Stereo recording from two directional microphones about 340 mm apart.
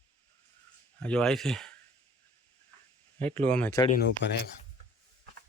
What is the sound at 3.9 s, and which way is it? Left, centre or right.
Speech, left.